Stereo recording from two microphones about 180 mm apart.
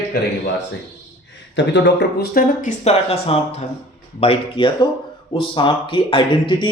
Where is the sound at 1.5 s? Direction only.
80° left.